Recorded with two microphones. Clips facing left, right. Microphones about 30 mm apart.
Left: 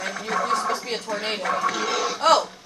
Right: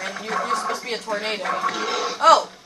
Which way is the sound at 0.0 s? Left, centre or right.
Right.